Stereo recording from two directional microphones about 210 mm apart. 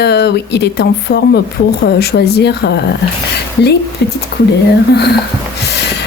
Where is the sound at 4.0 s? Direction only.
55° left (ahead or behind).